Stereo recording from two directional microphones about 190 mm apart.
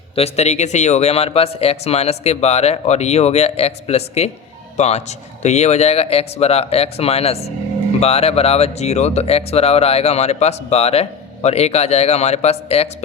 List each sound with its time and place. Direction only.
0.2 s speech: 35° left (ahead or behind)